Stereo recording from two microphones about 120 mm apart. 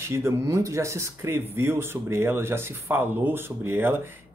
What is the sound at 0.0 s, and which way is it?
Speech, 20° right (ahead or behind).